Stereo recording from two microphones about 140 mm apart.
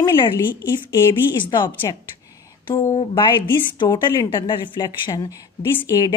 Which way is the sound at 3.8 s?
35° left (ahead or behind).